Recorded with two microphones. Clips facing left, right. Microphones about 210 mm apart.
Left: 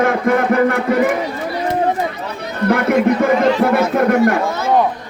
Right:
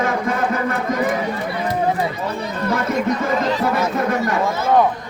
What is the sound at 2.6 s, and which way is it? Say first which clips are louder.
Music: left 7 dB; 60° left (ahead or behind).